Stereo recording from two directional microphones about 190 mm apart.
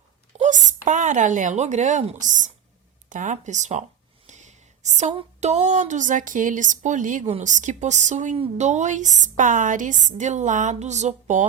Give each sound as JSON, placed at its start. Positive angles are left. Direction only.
{"t": 0.3, "sound": "speech", "side_deg": -40}